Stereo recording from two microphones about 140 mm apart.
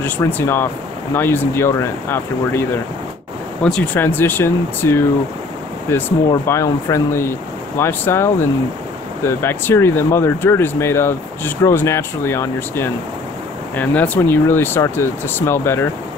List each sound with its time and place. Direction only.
0.0 s speech: 15° left (ahead or behind)